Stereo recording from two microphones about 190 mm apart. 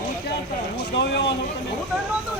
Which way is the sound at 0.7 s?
65° left (ahead or behind).